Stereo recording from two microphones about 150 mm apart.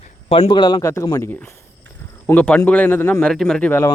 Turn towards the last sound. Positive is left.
turn(degrees=5)  # may be behind; listen again after turning